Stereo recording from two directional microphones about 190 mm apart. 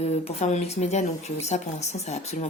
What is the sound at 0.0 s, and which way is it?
Speech, 35° left (ahead or behind).